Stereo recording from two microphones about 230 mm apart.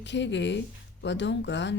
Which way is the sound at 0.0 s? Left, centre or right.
Left.